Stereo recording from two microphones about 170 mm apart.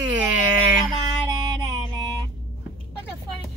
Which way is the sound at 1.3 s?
25° right (ahead or behind).